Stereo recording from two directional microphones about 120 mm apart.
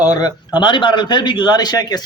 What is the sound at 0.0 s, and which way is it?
A man's voice, 30° left (ahead or behind).